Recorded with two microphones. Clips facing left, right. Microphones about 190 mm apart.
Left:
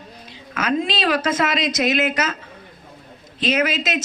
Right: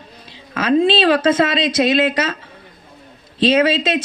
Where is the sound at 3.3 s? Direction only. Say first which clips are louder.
Right 6 dB; 30° right (ahead or behind).